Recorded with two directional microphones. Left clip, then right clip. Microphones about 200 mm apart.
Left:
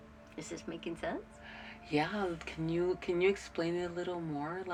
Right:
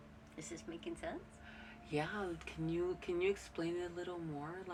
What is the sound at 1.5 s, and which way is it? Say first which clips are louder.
Speech: left 7 dB; 15° left (ahead or behind).